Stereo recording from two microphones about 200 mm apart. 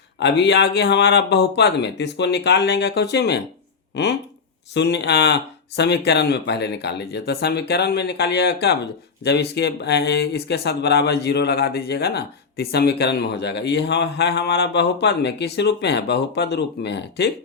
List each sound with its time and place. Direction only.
0.2 s speech: 60° left (ahead or behind)